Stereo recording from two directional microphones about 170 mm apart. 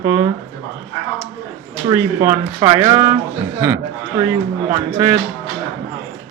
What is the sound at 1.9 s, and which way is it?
A man's voice, 20° right (ahead or behind).